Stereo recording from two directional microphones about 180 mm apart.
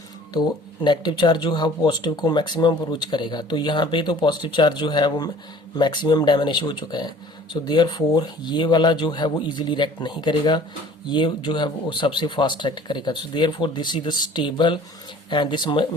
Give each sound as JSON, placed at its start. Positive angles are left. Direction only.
{"t": 0.3, "sound": "speech", "side_deg": 25}